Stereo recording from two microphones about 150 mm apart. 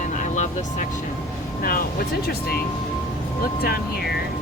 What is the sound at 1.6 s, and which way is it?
Speech, 70° left (ahead or behind).